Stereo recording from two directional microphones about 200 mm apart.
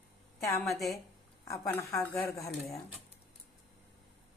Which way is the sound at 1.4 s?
15° left (ahead or behind).